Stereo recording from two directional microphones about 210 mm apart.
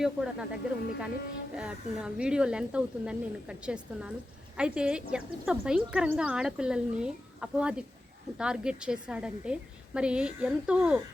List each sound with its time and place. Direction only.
0.0 s speech: 5° right (ahead or behind)
4.5 s speech: 5° right (ahead or behind)